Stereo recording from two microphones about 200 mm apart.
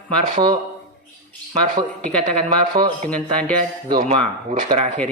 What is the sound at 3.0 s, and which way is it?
Speech, 5° left (ahead or behind).